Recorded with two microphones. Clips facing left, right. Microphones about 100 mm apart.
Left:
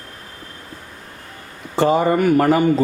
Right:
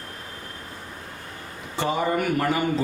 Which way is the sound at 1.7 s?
35° left (ahead or behind).